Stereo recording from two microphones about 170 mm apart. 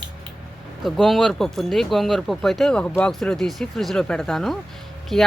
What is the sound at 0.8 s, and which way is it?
Speech, centre (ahead or behind).